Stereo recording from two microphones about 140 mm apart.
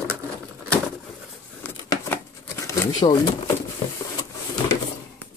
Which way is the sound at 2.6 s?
25° left (ahead or behind).